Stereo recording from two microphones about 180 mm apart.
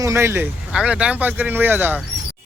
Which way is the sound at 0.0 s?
15° right (ahead or behind).